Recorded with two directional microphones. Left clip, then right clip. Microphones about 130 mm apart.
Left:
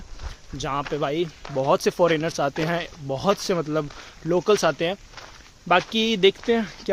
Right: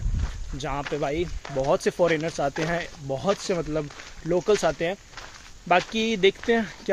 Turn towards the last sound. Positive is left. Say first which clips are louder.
# left 1 dB
turn(degrees=20)  # may be behind; listen again after turning